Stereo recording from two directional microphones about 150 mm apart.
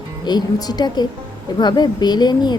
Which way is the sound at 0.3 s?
30° left (ahead or behind).